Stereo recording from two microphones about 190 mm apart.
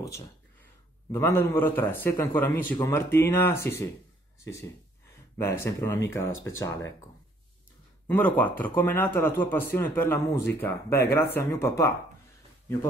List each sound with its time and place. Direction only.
1.1 s a man's voice: 10° left (ahead or behind)
5.4 s a man's voice: 15° left (ahead or behind)
8.1 s a man's voice: 10° left (ahead or behind)